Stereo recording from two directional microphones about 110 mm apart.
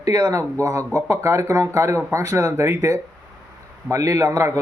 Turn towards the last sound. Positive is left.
turn(degrees=-25)  # may be behind; listen again after turning